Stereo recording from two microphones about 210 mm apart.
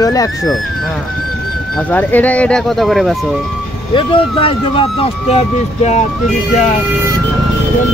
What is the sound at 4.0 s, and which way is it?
Speech, 25° left (ahead or behind).